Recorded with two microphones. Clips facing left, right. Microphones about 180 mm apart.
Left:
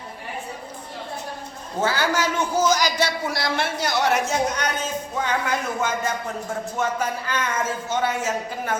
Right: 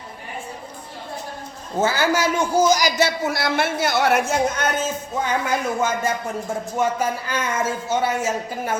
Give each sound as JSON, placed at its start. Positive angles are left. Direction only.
{"t": 1.8, "sound": "a man's voice", "side_deg": -10}